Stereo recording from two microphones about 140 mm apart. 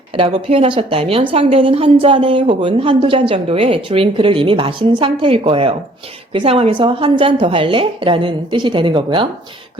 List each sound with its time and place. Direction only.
0.2 s a woman's voice: 40° right (ahead or behind)